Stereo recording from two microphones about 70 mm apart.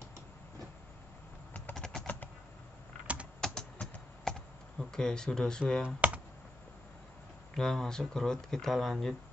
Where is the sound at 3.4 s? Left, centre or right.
Centre.